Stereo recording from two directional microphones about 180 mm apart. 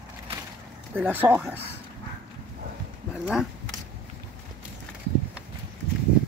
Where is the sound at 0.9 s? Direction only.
10° right (ahead or behind).